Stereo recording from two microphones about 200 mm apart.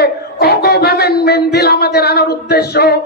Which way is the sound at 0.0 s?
55° left (ahead or behind).